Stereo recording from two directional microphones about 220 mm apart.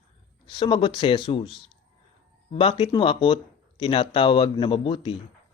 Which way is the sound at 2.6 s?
25° left (ahead or behind).